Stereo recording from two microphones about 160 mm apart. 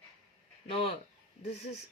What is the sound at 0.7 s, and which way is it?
Speech, 35° left (ahead or behind).